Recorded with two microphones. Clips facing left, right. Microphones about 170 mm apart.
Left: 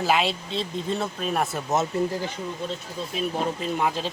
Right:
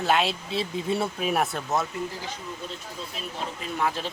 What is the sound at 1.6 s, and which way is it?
Speech, 20° left (ahead or behind).